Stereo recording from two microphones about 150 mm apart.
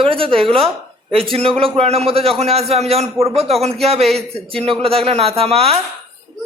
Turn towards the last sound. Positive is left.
turn(degrees=-40)  # may be behind; listen again after turning